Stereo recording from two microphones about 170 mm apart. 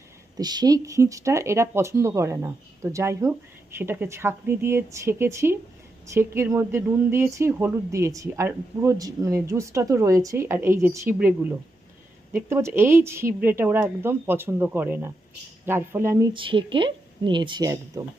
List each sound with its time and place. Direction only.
0.3 s speech: 25° right (ahead or behind)
16.3 s speech: 30° right (ahead or behind)